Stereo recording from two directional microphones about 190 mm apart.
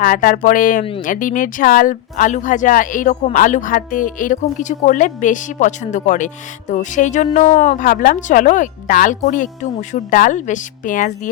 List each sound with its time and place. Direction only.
0.0 s a woman's voice: 45° left (ahead or behind)